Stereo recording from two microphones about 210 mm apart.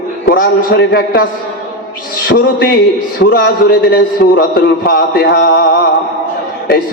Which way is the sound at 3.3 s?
50° left (ahead or behind).